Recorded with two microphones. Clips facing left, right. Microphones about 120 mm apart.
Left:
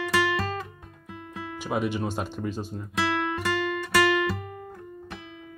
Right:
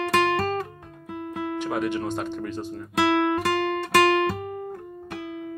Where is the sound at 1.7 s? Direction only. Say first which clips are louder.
Left 1 dB; 15° left (ahead or behind).